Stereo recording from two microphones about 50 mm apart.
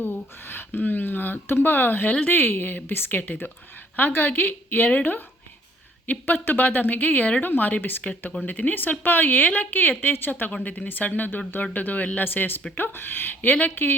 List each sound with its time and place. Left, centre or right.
0.0 s speech: left
6.1 s speech: left
10.5 s speech: left
12.2 s speech: left